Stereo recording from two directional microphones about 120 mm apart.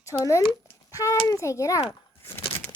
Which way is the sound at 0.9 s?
25° left (ahead or behind).